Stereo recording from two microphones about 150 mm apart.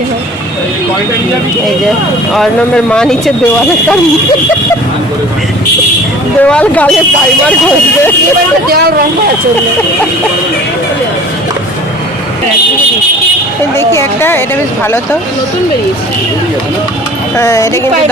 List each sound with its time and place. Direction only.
2.3 s speech: 5° left (ahead or behind)
6.4 s a woman's voice: 10° left (ahead or behind)
13.7 s a woman's voice: 15° left (ahead or behind)
17.3 s speech: 20° left (ahead or behind)